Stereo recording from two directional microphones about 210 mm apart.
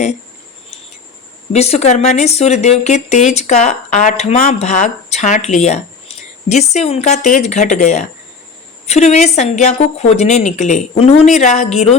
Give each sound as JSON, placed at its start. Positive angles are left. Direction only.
{"t": 1.5, "sound": "speech", "side_deg": 30}